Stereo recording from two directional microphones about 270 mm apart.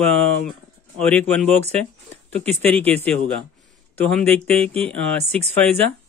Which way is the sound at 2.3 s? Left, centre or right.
Centre.